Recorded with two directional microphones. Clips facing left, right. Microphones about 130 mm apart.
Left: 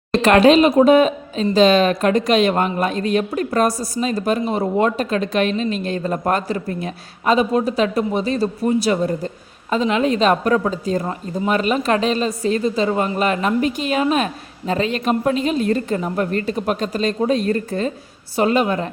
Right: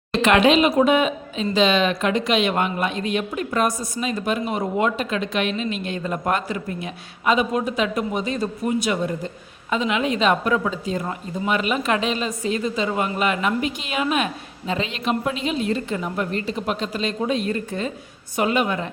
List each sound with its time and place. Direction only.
0.1 s a woman's voice: 40° left (ahead or behind)